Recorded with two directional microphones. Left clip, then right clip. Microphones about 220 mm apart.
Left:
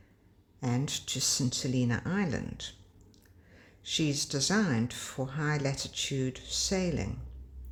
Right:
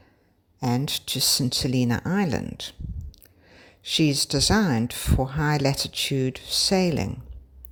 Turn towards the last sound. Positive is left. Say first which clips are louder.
# right 9 dB
turn(degrees=-35)  # may be behind; listen again after turning